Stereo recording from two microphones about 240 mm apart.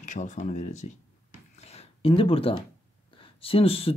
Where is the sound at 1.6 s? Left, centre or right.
Left.